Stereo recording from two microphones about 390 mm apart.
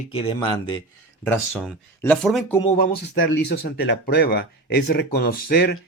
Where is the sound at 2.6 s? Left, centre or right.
Left.